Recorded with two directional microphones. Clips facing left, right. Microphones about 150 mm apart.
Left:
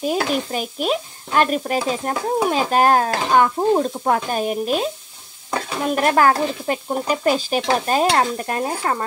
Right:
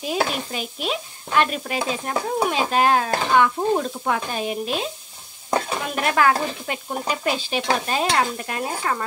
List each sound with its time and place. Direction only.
0.0 s stir: 45° left (ahead or behind)
5.9 s stir: 40° left (ahead or behind)